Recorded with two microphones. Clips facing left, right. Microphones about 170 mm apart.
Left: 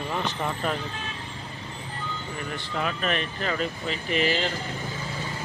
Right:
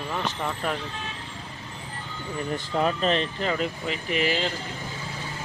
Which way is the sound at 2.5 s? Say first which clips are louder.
Right 6 dB; 30° right (ahead or behind).